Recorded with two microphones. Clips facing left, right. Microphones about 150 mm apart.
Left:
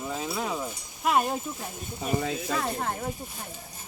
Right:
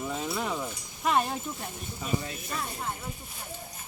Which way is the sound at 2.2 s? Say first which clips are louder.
Left 7 dB; 90° left.